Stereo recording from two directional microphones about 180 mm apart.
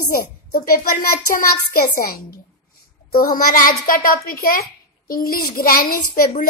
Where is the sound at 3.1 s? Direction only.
50° left (ahead or behind).